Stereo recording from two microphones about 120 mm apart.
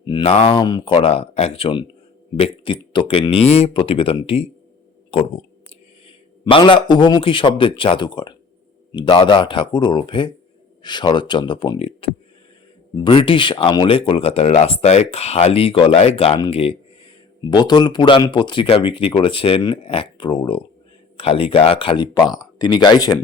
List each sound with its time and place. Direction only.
0.0 s a sound: 40° left (ahead or behind)
0.3 s speech: 50° left (ahead or behind)
6.4 s a man's voice: 40° left (ahead or behind)
17.5 s a man's voice: 35° left (ahead or behind)